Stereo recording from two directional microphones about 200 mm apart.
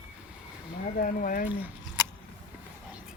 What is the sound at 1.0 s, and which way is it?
Speech, 45° left (ahead or behind).